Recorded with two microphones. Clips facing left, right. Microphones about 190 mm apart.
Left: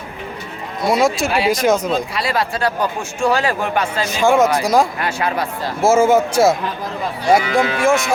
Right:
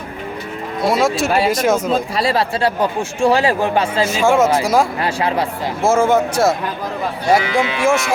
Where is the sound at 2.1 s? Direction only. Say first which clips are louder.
Right 3 dB; 30° right (ahead or behind).